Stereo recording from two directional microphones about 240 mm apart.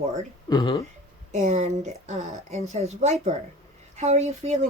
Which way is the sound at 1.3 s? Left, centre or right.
Right.